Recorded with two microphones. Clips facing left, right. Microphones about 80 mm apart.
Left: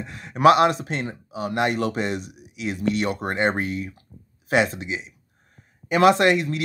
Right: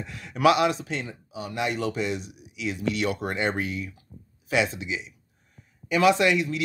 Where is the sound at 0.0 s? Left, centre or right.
Left.